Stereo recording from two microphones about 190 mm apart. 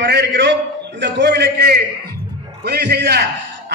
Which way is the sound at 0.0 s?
65° right (ahead or behind).